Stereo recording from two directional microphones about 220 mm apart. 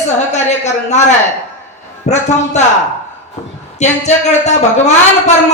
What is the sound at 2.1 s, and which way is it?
Speech, 30° left (ahead or behind).